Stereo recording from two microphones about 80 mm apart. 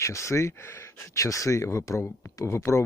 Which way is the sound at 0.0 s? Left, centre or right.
Left.